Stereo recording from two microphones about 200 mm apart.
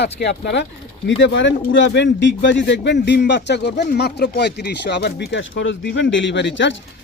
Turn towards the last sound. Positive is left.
turn(degrees=65)  # may be behind; listen again after turning